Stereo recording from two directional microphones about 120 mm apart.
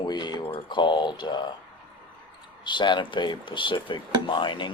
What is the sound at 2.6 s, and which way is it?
Speech, 40° left (ahead or behind).